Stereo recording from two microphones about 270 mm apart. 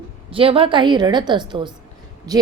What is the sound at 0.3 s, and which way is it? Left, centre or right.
A woman's voice, centre.